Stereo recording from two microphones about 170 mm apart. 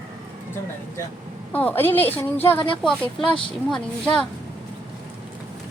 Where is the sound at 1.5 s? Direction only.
10° left (ahead or behind).